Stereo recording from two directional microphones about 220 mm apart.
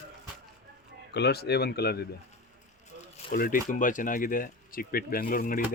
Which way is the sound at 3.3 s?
40° left (ahead or behind).